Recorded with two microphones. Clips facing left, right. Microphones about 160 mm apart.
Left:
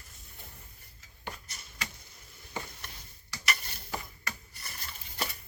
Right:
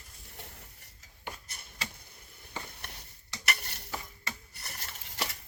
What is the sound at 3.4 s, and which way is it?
Stir, 70° right (ahead or behind).